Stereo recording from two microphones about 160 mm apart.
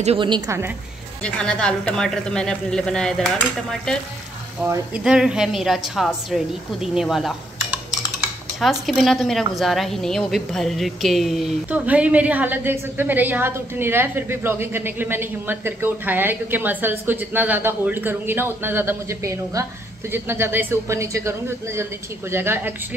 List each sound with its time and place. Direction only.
0.0 s a woman's voice: 35° right (ahead or behind)
1.2 s a woman's voice: 5° left (ahead or behind)
4.6 s a woman's voice: 5° right (ahead or behind)
8.5 s a woman's voice: centre (ahead or behind)